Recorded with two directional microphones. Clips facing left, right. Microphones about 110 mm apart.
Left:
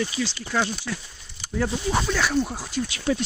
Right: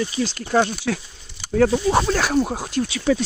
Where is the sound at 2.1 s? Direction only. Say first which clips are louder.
Right 4 dB; 45° right (ahead or behind).